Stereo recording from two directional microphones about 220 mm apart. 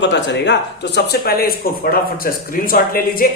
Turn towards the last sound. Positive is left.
turn(degrees=40)  # may be behind; listen again after turning